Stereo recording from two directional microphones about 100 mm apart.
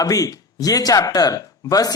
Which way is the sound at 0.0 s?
35° left (ahead or behind).